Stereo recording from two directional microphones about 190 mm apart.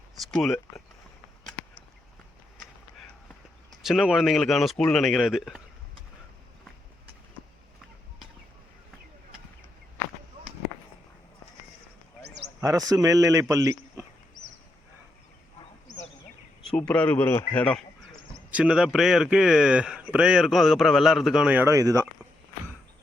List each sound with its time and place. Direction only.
0.3 s speech: centre (ahead or behind)
3.8 s speech: centre (ahead or behind)
12.5 s a man's voice: 20° right (ahead or behind)
16.7 s speech: 5° left (ahead or behind)
18.5 s speech: 5° right (ahead or behind)